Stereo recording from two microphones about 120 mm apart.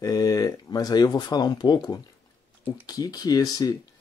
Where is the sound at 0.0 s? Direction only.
30° left (ahead or behind).